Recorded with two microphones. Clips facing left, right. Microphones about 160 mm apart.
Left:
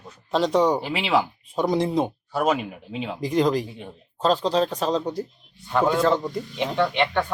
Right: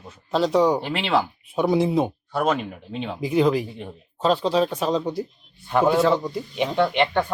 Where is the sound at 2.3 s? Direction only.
5° left (ahead or behind).